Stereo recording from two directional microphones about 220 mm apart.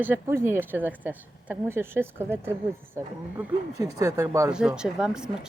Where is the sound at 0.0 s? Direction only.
10° right (ahead or behind).